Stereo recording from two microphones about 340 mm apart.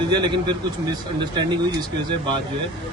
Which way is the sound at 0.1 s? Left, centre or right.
Centre.